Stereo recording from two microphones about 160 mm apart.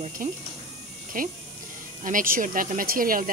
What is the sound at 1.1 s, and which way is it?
Speech, 60° right (ahead or behind).